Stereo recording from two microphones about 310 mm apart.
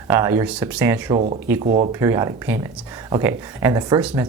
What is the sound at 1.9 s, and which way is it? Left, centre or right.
Speech, centre.